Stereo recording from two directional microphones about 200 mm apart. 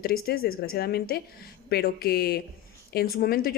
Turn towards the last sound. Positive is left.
turn(degrees=45)  # may be behind; listen again after turning